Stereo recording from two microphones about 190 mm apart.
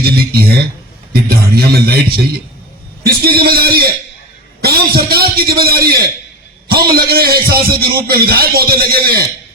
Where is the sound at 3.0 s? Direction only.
55° right (ahead or behind).